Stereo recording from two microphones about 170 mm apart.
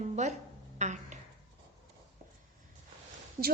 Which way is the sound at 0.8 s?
45° right (ahead or behind).